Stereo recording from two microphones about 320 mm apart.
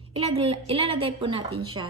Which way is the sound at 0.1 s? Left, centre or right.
Centre.